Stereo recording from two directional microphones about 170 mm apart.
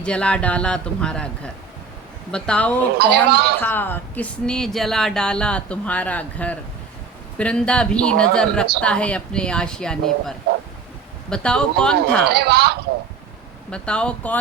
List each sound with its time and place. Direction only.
0.0 s speech: 5° left (ahead or behind)
2.3 s speech: 5° left (ahead or behind)
3.0 s a man's voice: 70° right (ahead or behind)
3.6 s speech: 10° left (ahead or behind)
12.3 s a man's voice: 70° right (ahead or behind)
13.7 s speech: 5° left (ahead or behind)